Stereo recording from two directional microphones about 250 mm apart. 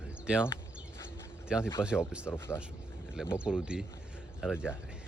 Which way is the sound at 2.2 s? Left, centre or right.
Centre.